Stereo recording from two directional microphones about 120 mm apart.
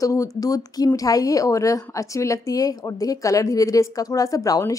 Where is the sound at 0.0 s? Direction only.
25° left (ahead or behind).